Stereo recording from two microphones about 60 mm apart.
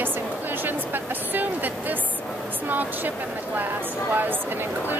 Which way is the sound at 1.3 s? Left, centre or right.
Right.